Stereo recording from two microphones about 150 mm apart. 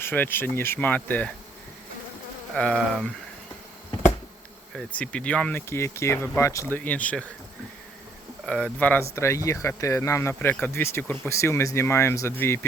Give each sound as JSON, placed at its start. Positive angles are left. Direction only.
{"t": 0.0, "sound": "speech", "side_deg": 15}
{"t": 2.6, "sound": "speech", "side_deg": 5}
{"t": 4.7, "sound": "speech", "side_deg": 5}
{"t": 8.4, "sound": "speech", "side_deg": 10}